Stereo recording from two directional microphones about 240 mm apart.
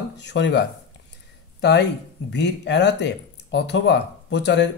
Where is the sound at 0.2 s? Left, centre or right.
Left.